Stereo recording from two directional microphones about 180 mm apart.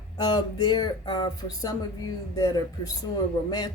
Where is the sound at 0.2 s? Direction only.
25° left (ahead or behind).